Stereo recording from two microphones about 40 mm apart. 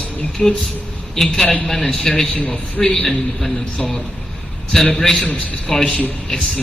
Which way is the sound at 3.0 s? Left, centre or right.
Centre.